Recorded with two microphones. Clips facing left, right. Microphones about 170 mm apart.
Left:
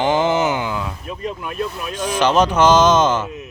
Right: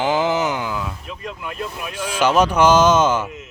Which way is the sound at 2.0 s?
10° right (ahead or behind).